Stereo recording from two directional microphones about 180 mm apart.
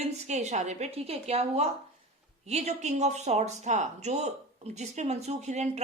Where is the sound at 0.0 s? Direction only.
40° right (ahead or behind).